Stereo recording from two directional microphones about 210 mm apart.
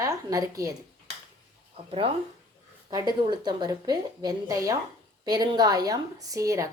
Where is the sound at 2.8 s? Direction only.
20° right (ahead or behind).